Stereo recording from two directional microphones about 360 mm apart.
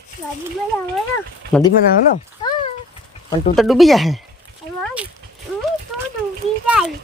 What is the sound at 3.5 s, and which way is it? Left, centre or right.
Speech, centre.